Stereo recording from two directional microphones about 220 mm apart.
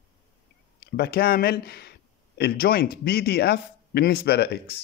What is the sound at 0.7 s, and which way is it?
A man's voice, 45° left (ahead or behind).